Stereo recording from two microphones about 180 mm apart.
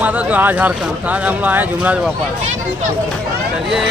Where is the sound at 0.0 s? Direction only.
10° right (ahead or behind).